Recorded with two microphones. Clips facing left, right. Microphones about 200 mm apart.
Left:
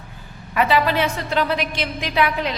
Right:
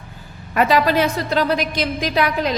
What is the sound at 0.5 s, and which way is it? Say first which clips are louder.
A woman's voice: right 2 dB; 40° right (ahead or behind).